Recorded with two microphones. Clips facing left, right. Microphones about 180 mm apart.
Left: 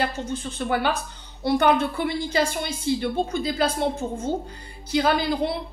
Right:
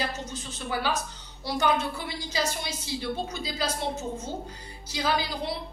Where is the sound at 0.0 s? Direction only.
55° left (ahead or behind).